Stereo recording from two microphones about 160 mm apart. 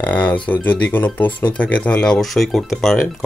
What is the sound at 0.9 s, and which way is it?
Speech, 10° left (ahead or behind).